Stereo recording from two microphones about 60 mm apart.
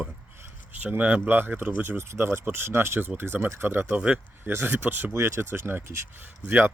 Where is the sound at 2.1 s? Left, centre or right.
Right.